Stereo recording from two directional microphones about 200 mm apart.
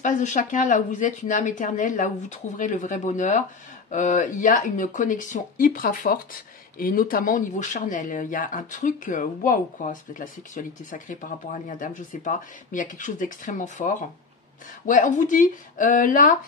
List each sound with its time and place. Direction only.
0.0 s speech: 40° left (ahead or behind)